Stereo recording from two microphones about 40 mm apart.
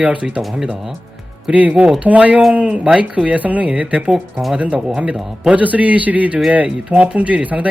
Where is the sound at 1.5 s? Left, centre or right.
Right.